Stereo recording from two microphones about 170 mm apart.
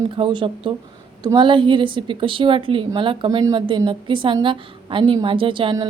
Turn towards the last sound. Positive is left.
turn(degrees=-30)  # may be behind; listen again after turning